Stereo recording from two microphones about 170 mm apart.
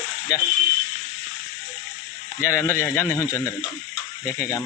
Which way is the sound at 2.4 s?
15° left (ahead or behind).